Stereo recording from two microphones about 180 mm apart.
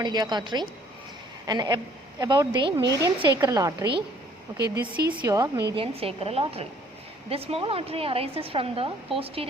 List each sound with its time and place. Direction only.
0.0 s a woman's voice: 25° right (ahead or behind)
5.2 s a woman's voice: 20° right (ahead or behind)
5.7 s a woman's voice: 30° right (ahead or behind)